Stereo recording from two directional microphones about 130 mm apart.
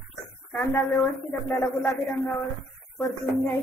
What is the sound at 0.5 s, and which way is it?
A woman's voice, 20° left (ahead or behind).